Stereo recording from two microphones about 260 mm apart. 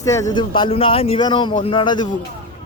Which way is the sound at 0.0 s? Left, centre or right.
Centre.